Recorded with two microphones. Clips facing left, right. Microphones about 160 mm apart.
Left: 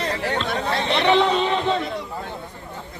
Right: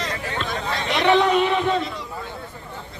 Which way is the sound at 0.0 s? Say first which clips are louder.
Left 4 dB; 65° left (ahead or behind).